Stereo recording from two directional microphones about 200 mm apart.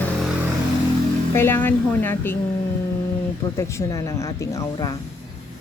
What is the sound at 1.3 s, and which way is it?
Speech, 10° left (ahead or behind).